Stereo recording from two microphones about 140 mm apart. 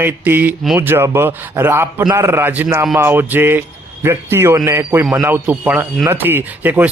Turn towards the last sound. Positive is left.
turn(degrees=-10)  # may be behind; listen again after turning